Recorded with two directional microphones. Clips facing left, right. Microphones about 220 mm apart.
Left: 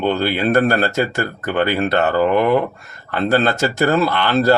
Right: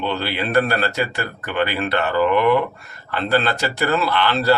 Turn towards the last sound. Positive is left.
turn(degrees=45)  # may be behind; listen again after turning